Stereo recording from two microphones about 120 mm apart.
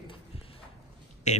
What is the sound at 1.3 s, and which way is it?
Speech, 70° left (ahead or behind).